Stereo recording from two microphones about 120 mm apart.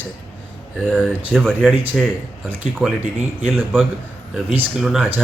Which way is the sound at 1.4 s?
Centre (ahead or behind).